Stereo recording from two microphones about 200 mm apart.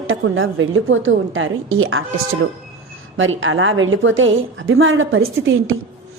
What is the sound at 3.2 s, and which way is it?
A woman's voice, 75° right (ahead or behind).